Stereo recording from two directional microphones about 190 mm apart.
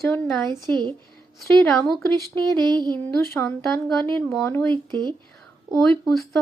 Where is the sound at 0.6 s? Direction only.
25° right (ahead or behind).